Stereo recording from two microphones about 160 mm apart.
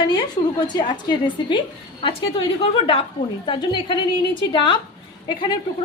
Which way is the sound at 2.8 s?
35° left (ahead or behind).